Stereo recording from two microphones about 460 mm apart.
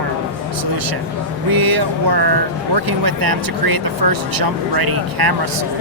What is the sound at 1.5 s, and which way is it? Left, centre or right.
Speech, right.